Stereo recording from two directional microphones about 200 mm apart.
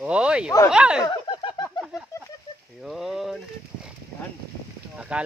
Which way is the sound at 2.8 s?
Centre (ahead or behind).